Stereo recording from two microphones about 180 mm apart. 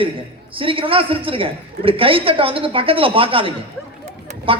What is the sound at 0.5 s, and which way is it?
A woman's voice, 30° right (ahead or behind).